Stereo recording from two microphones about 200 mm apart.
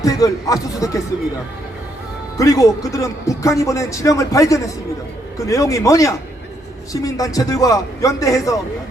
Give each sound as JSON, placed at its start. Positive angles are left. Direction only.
{"t": 0.0, "sound": "speech", "side_deg": 15}
{"t": 2.4, "sound": "speech", "side_deg": 15}